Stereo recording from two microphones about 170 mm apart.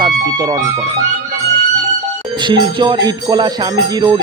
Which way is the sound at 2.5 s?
30° right (ahead or behind).